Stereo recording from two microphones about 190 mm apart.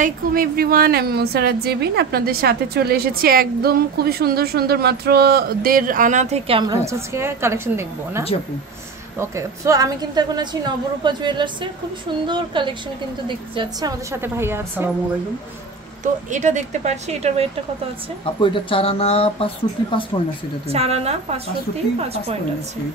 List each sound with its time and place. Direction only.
0.0 s a woman's voice: 50° right (ahead or behind); by 6.6 s 35° right (ahead or behind)
6.7 s a woman's voice: 15° right (ahead or behind)
9.2 s a woman's voice: 15° right (ahead or behind)
16.0 s speech: 40° right (ahead or behind)
18.2 s speech: 25° left (ahead or behind)
20.6 s speech: 35° right (ahead or behind)